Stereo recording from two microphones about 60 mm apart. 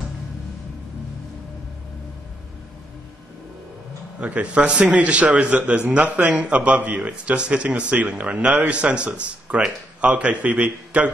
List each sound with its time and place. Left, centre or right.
4.2 s a man's voice: right